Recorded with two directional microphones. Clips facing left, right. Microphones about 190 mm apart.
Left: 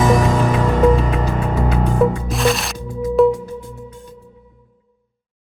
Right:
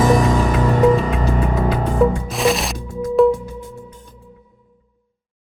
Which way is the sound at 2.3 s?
Centre (ahead or behind).